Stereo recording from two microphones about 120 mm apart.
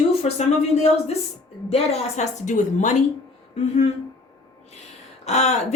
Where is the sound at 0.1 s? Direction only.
60° left (ahead or behind); by 2.9 s 85° left.